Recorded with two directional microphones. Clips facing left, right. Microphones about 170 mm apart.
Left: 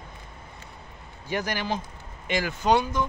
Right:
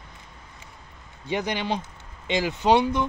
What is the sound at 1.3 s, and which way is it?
Speech, 20° right (ahead or behind).